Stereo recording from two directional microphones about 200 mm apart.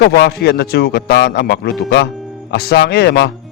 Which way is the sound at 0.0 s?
55° left (ahead or behind).